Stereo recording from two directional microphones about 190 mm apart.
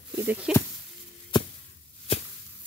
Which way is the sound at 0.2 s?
5° right (ahead or behind).